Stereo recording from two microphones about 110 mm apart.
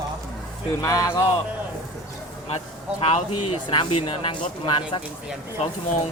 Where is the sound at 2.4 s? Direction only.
65° left (ahead or behind).